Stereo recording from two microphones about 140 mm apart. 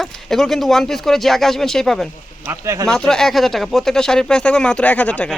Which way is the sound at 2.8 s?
5° left (ahead or behind).